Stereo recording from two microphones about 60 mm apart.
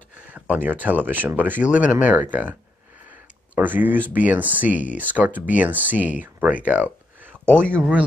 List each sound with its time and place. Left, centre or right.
0.3 s a sound: right
0.8 s speech: right
7.6 s speech: centre